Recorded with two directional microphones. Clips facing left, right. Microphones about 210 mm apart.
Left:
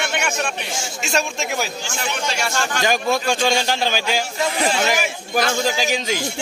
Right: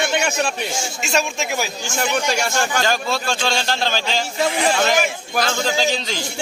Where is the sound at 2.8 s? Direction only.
15° left (ahead or behind).